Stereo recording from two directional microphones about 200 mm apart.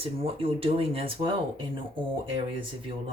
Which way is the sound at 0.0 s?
30° right (ahead or behind).